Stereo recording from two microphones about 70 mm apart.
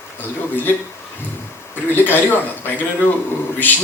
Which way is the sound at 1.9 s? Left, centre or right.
Left.